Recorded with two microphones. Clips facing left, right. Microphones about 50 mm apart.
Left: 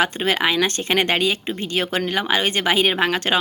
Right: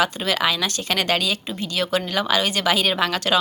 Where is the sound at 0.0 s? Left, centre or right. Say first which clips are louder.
Left 1 dB; left.